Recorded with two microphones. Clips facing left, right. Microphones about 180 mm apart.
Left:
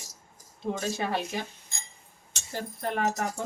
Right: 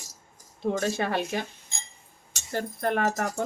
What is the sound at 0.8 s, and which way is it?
Speech, 65° right (ahead or behind).